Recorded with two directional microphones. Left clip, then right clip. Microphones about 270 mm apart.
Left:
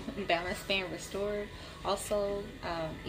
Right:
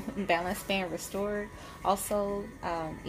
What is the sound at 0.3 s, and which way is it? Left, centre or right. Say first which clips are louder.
A woman's voice: right 2 dB; right.